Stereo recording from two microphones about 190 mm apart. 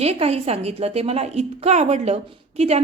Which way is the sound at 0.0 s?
35° right (ahead or behind).